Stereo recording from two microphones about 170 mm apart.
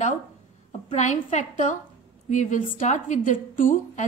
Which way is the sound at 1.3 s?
45° left (ahead or behind).